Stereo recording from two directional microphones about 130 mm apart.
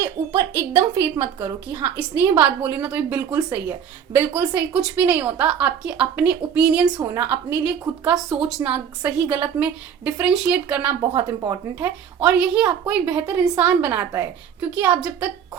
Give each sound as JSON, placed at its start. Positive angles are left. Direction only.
{"t": 0.0, "sound": "a woman's voice", "side_deg": -20}
{"t": 7.0, "sound": "a woman's voice", "side_deg": -20}
{"t": 11.2, "sound": "speech", "side_deg": -20}
{"t": 12.2, "sound": "a woman's voice", "side_deg": -10}